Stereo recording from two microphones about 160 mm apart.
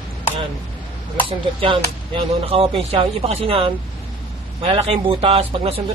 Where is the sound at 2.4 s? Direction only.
35° right (ahead or behind).